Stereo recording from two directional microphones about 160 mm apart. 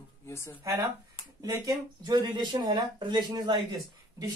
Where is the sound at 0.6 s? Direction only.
20° right (ahead or behind).